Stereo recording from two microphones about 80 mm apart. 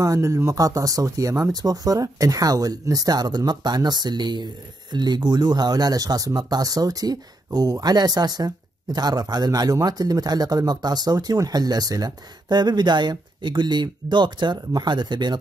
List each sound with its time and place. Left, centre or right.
0.0 s speech: right